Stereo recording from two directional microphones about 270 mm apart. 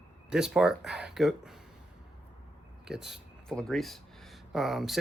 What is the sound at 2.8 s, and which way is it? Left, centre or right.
Speech, centre.